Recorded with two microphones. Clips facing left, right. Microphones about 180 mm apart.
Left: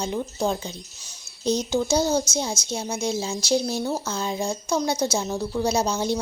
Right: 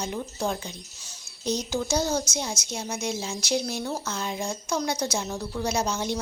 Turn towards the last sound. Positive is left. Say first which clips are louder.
# left 4 dB
turn(degrees=30)  # may be behind; listen again after turning